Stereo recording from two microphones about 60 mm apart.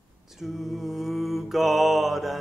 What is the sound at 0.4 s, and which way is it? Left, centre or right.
Mantra, centre.